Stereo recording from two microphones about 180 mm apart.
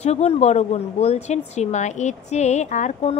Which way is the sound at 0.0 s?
35° left (ahead or behind).